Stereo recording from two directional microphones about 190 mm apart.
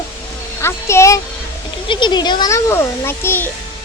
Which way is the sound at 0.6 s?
15° left (ahead or behind).